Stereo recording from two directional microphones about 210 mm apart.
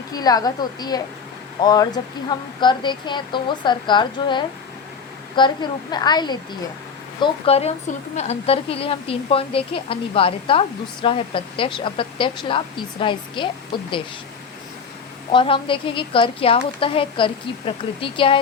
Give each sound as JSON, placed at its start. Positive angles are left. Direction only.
{"t": 0.1, "sound": "a woman's voice", "side_deg": 20}
{"t": 15.3, "sound": "a woman's voice", "side_deg": 25}